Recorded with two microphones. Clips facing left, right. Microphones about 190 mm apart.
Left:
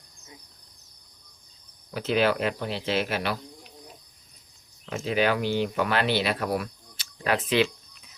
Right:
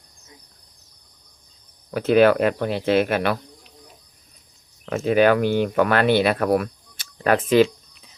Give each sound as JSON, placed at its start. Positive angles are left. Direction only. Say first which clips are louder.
{"t": 1.9, "sound": "speech", "louder": "right 8 dB", "side_deg": -55}
{"t": 4.9, "sound": "speech", "louder": "right 8 dB", "side_deg": -55}